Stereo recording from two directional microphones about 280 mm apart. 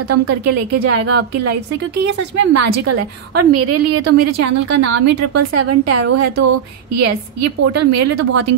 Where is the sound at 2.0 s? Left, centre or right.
Right.